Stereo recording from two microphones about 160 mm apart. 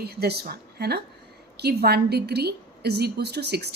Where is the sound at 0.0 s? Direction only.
80° right.